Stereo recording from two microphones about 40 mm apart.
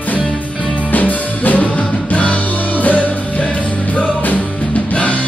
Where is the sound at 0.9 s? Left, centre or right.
Left.